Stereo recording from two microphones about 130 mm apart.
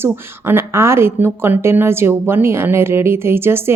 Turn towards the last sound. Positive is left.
turn(degrees=-20)  # may be behind; listen again after turning